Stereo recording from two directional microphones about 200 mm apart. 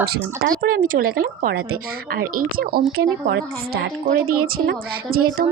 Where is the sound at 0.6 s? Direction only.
45° right (ahead or behind).